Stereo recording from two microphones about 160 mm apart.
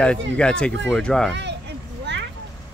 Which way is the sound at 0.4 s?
5° left (ahead or behind).